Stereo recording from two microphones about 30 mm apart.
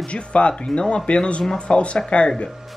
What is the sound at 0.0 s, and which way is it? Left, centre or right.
Speech, left.